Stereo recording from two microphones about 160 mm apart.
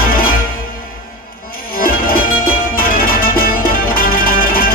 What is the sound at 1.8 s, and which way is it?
Music, 65° left (ahead or behind).